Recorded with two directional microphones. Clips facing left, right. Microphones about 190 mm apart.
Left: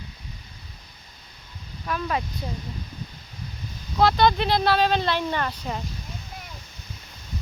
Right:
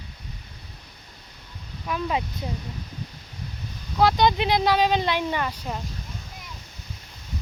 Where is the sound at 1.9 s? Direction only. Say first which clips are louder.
Right 1 dB; 15° right (ahead or behind).